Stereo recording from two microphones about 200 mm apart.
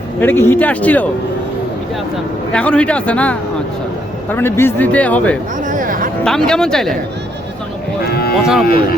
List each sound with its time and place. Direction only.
0.2 s speech: 10° left (ahead or behind)
2.5 s a man's voice: 5° left (ahead or behind)
5.6 s speech: 40° right (ahead or behind)
6.2 s a man's voice: 5° left (ahead or behind)
8.0 s a sound: 50° left (ahead or behind)
8.4 s a man's voice: centre (ahead or behind)
8.6 s speech: 50° left (ahead or behind)